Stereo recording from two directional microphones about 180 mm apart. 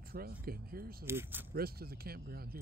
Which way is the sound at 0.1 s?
55° right (ahead or behind).